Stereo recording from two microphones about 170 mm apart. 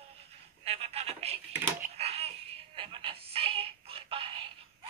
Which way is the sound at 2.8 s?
35° right (ahead or behind).